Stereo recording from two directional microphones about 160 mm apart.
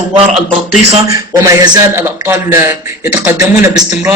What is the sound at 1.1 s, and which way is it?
A man's voice, 20° right (ahead or behind).